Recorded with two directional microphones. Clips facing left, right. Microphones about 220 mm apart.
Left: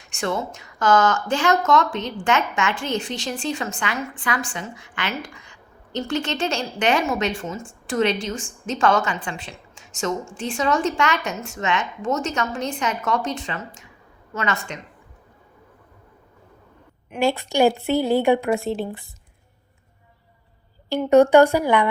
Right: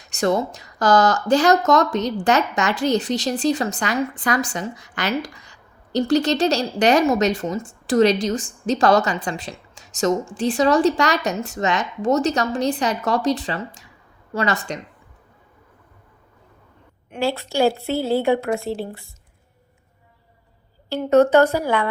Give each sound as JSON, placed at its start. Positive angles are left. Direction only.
{"t": 0.0, "sound": "speech", "side_deg": -40}
{"t": 17.2, "sound": "speech", "side_deg": 15}
{"t": 20.9, "sound": "speech", "side_deg": 15}